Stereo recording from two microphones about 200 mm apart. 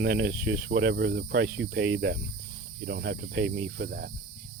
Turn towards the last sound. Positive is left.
turn(degrees=-50)  # may be behind; listen again after turning